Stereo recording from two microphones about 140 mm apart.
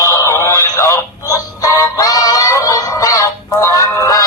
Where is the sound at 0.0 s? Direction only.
20° left (ahead or behind).